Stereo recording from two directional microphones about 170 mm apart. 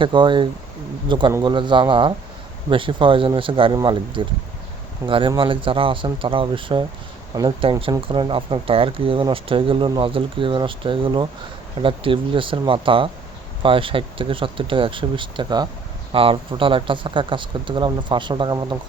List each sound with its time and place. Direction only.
0.0 s speech: 30° right (ahead or behind)